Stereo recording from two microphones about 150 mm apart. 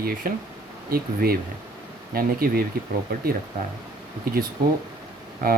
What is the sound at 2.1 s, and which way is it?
Speech, 80° right.